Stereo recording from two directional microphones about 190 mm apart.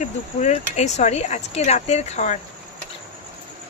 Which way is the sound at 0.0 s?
35° left (ahead or behind).